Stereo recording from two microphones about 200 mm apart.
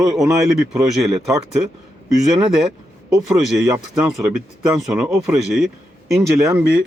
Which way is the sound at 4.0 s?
Centre (ahead or behind).